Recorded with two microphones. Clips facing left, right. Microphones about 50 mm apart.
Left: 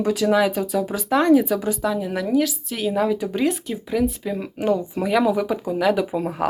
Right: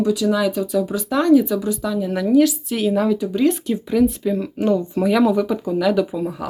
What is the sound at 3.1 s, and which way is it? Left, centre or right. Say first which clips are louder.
Speech: right 3 dB; left.